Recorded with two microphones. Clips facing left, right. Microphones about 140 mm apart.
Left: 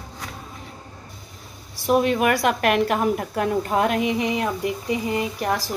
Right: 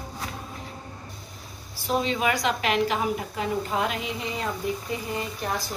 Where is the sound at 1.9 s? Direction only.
60° left (ahead or behind).